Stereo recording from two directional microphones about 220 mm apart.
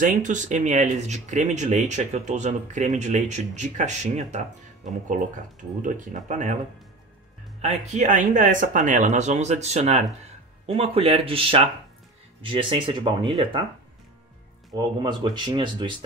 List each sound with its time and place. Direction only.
0.0 s speech: 35° right (ahead or behind)
7.6 s speech: 30° right (ahead or behind)
14.7 s speech: 20° right (ahead or behind)